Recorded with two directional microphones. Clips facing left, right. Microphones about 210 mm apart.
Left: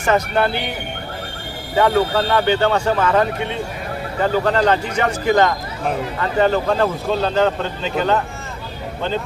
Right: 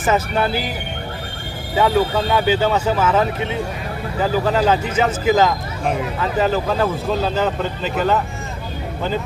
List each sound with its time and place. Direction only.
0.0 s speech: 5° right (ahead or behind)
1.8 s speech: 5° right (ahead or behind)